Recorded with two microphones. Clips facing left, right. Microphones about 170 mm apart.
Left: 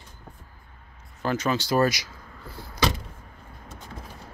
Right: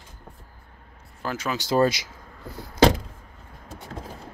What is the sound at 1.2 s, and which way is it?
Speech, 5° right (ahead or behind).